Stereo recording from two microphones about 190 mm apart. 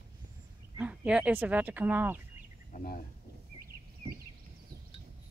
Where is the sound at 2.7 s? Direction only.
45° left (ahead or behind).